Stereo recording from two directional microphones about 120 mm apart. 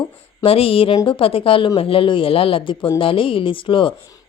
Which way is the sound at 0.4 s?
50° left (ahead or behind).